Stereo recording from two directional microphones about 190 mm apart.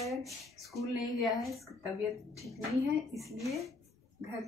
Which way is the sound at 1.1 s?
Centre (ahead or behind).